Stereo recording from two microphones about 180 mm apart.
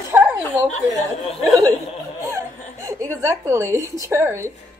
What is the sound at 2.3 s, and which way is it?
Speech, 15° right (ahead or behind).